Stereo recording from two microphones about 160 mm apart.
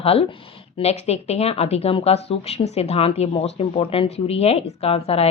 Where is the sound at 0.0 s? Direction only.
35° left (ahead or behind).